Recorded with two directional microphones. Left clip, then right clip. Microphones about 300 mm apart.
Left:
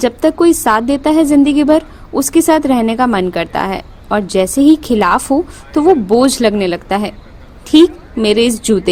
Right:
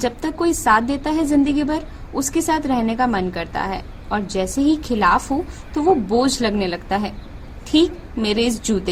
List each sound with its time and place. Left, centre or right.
0.0 s a woman's voice: left